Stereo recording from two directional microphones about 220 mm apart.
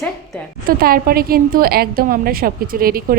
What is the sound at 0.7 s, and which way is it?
A woman's voice, 40° right (ahead or behind).